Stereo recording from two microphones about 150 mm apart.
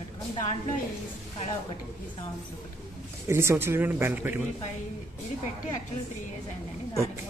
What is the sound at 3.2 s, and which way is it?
Speech, 15° right (ahead or behind).